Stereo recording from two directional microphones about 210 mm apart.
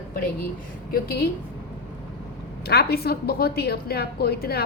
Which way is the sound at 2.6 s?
50° left (ahead or behind).